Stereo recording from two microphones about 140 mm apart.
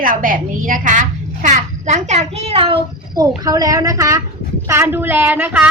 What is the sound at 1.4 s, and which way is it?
A child's voice, 55° right (ahead or behind).